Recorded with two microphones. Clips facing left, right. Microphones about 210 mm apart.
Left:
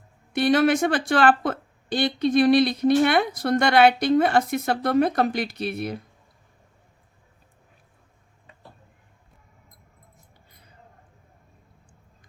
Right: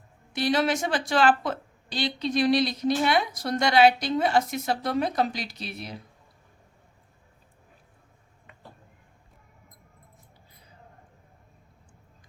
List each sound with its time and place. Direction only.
0.3 s speech: 55° left (ahead or behind)